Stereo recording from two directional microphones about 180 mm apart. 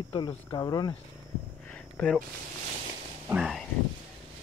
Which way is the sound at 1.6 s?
5° left (ahead or behind).